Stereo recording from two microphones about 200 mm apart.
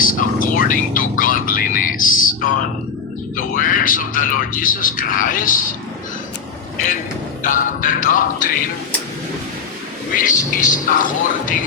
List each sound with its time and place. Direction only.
0.0 s a sound: 45° left (ahead or behind)
3.3 s a man's voice: 40° left (ahead or behind)
7.4 s speech: 40° left (ahead or behind)
10.2 s speech: 40° left (ahead or behind)